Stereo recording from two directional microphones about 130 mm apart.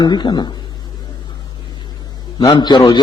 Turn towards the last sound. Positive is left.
turn(degrees=35)  # may be behind; listen again after turning